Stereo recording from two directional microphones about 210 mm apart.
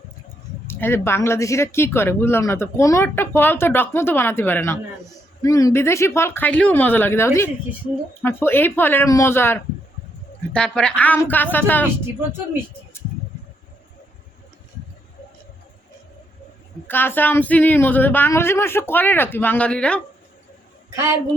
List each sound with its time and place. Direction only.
0.7 s speech: 10° left (ahead or behind)
16.8 s speech: 10° left (ahead or behind)
20.9 s a woman's voice: 15° right (ahead or behind)